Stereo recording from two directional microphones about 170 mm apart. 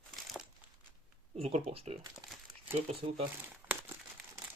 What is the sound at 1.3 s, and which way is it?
Speech, 35° right (ahead or behind).